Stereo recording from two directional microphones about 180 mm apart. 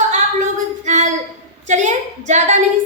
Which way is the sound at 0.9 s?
40° right (ahead or behind).